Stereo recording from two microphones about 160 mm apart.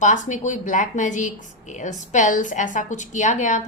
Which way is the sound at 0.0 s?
50° left (ahead or behind).